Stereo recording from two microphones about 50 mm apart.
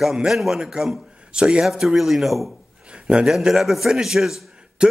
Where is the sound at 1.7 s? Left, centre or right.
Centre.